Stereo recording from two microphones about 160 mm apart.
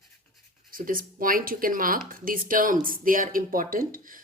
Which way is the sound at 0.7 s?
60° right (ahead or behind).